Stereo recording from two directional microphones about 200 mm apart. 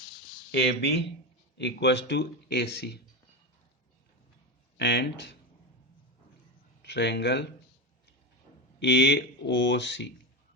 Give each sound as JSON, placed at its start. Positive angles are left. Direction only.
{"t": 0.5, "sound": "speech", "side_deg": 50}
{"t": 4.8, "sound": "speech", "side_deg": 60}
{"t": 6.8, "sound": "speech", "side_deg": 60}
{"t": 8.8, "sound": "speech", "side_deg": 60}